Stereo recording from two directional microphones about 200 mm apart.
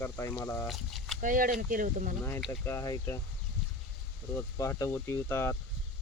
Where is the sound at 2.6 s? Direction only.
15° left (ahead or behind).